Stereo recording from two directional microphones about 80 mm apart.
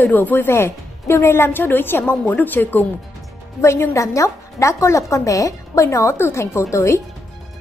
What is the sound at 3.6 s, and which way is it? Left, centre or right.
A woman's voice, left.